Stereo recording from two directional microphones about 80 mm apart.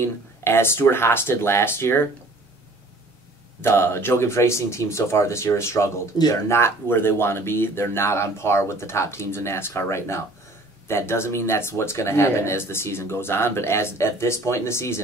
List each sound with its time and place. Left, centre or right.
0.0 s speech: left
3.6 s speech: left
6.1 s speech: left
6.5 s speech: left